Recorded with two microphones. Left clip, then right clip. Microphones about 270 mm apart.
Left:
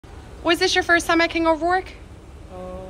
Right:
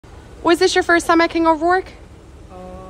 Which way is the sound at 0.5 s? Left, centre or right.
Right.